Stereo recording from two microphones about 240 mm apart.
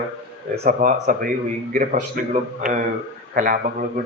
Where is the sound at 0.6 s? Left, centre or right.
Right.